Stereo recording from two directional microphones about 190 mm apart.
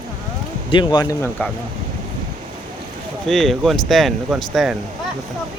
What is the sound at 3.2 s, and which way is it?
Speech, centre (ahead or behind).